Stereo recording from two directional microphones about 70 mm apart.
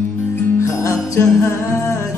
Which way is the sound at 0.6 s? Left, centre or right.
Left.